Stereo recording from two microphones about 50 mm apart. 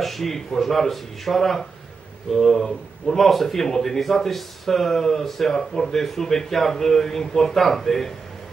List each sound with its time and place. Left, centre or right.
0.0 s speech: centre